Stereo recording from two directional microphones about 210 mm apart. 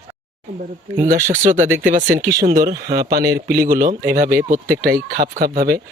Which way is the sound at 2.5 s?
45° right (ahead or behind).